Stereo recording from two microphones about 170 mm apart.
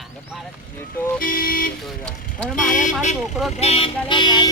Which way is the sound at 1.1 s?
55° left (ahead or behind).